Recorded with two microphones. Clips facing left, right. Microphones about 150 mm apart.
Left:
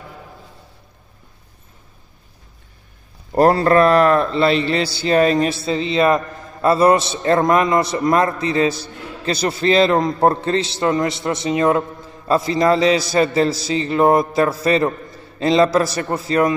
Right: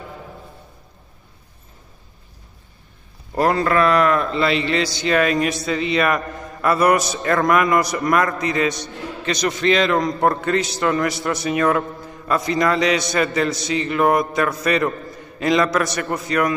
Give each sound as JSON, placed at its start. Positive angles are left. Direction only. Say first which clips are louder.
{"t": 3.3, "sound": "a man's voice", "louder": "left 5 dB", "side_deg": 35}